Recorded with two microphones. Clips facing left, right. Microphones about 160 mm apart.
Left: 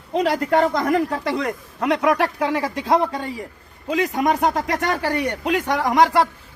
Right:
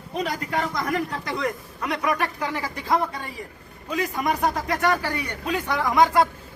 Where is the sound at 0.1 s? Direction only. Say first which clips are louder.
Left 8 dB; 90° left.